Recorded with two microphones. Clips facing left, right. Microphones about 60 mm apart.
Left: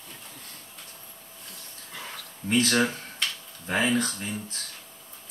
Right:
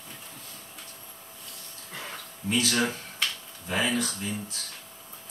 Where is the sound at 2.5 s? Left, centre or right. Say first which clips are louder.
Left 3 dB; left.